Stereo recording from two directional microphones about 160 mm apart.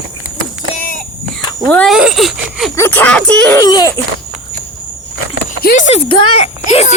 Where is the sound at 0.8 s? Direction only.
60° left (ahead or behind).